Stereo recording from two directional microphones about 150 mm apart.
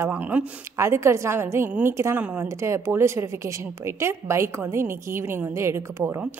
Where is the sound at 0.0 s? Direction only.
15° right (ahead or behind).